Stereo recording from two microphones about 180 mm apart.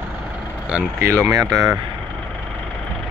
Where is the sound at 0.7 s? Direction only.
10° right (ahead or behind).